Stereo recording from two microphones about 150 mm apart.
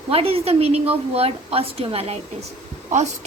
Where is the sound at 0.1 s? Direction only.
40° right (ahead or behind).